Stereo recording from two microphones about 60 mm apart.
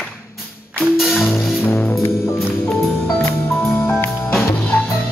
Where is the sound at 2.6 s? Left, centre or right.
Centre.